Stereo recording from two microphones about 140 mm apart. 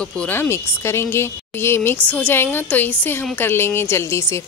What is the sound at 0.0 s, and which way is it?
A woman's voice, 10° left (ahead or behind).